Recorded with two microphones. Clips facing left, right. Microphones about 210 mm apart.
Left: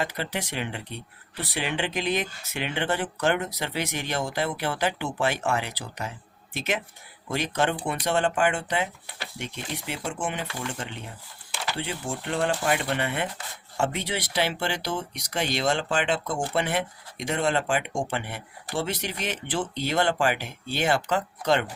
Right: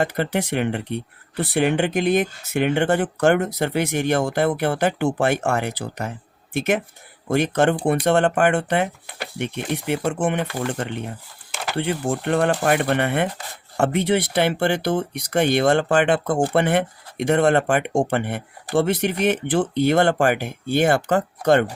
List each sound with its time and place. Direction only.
0.0 s speech: 50° right (ahead or behind)
10.4 s speech: 40° right (ahead or behind)
10.7 s speech: 60° right (ahead or behind)